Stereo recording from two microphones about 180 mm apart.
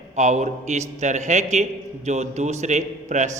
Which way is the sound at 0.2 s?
40° right (ahead or behind).